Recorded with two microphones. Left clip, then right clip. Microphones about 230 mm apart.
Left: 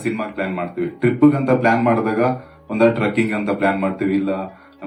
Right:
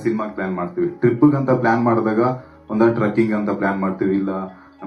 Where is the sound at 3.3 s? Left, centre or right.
Left.